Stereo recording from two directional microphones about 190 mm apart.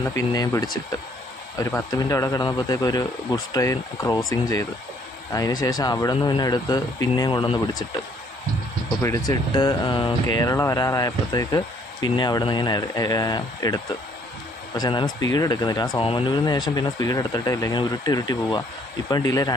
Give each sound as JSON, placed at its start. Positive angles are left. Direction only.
{"t": 0.1, "sound": "speech", "side_deg": 15}
{"t": 9.0, "sound": "speech", "side_deg": 15}